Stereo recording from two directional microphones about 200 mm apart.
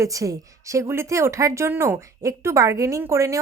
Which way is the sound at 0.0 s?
15° right (ahead or behind).